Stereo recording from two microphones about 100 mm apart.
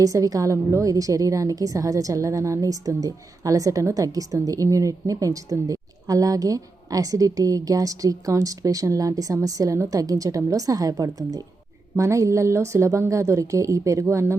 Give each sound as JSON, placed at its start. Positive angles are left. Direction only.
{"t": 0.0, "sound": "a woman's voice", "side_deg": -35}